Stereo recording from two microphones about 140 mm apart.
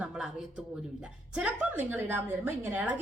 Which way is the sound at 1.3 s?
10° right (ahead or behind).